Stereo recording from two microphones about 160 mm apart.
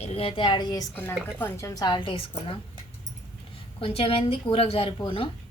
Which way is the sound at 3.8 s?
35° left (ahead or behind).